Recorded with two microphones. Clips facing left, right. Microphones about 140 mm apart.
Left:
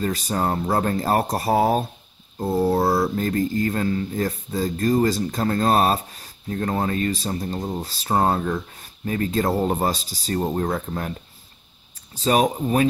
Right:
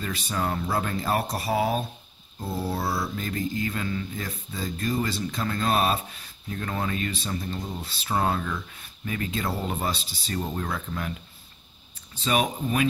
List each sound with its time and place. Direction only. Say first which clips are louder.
0.0 s mantra: left 6 dB; 40° left (ahead or behind)
12.2 s mantra: left 6 dB; 40° left (ahead or behind)